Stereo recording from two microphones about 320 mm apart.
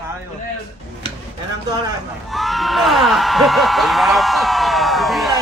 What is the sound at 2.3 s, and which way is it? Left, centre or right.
A man's voice, centre.